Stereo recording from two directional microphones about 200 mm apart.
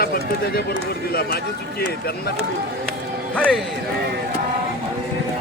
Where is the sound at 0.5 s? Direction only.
50° left (ahead or behind).